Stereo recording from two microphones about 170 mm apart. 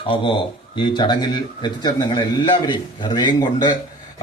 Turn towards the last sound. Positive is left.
turn(degrees=25)  # may be behind; listen again after turning